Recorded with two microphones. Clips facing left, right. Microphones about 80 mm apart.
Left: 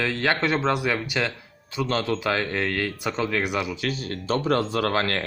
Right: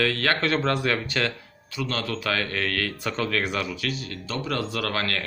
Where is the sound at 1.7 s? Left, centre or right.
Left.